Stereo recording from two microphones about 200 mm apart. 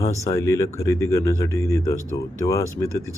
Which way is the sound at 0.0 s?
15° left (ahead or behind).